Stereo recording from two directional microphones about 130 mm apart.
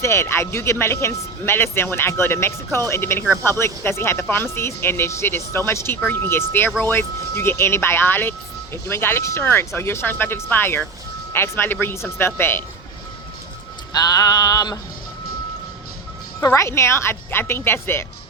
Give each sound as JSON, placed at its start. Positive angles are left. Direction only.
{"t": 0.0, "sound": "speech", "side_deg": 20}
{"t": 13.9, "sound": "speech", "side_deg": 30}
{"t": 16.4, "sound": "speech", "side_deg": 20}